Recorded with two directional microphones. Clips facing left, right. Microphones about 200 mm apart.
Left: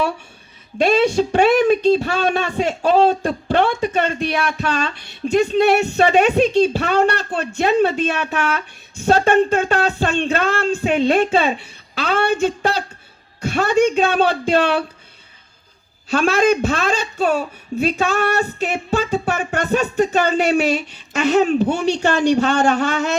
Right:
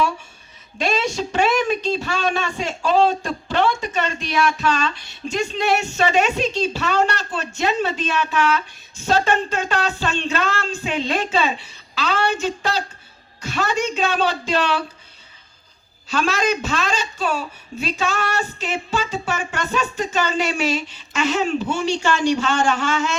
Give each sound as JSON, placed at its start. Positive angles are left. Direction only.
{"t": 0.8, "sound": "speech", "side_deg": 55}
{"t": 16.0, "sound": "speech", "side_deg": 55}